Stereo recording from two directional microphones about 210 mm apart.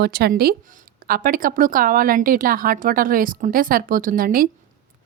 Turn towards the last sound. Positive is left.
turn(degrees=-40)  # may be behind; listen again after turning